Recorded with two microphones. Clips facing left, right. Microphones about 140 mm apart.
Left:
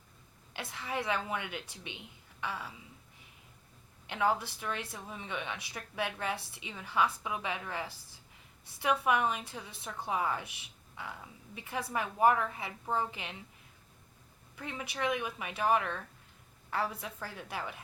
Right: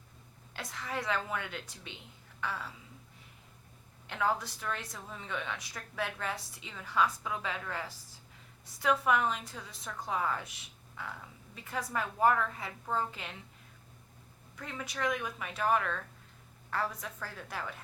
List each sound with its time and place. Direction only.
0.5 s a woman's voice: 25° left (ahead or behind)
4.0 s a woman's voice: 20° left (ahead or behind)
11.5 s a woman's voice: 20° left (ahead or behind)
14.6 s a woman's voice: 20° left (ahead or behind)